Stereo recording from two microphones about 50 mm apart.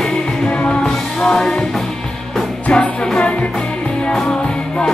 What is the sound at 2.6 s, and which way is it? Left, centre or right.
Music, left.